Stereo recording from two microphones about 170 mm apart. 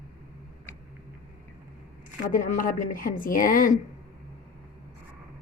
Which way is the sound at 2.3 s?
55° left (ahead or behind).